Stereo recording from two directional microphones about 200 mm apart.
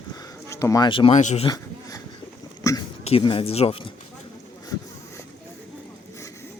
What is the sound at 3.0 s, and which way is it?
Speech, 25° left (ahead or behind).